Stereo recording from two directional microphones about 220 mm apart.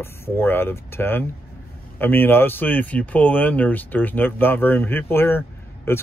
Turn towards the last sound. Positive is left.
turn(degrees=10)  # may be behind; listen again after turning